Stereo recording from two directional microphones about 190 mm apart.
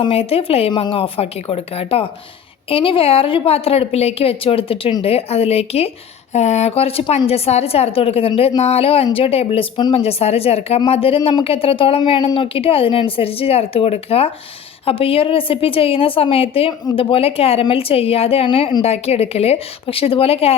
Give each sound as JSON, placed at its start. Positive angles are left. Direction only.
{"t": 0.0, "sound": "a woman's voice", "side_deg": 30}